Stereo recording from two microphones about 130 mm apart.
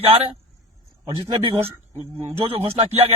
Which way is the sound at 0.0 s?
50° right (ahead or behind).